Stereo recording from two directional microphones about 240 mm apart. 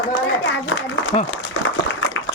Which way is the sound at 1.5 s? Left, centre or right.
Left.